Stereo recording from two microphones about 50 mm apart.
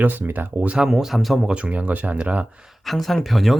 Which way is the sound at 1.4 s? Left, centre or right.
Right.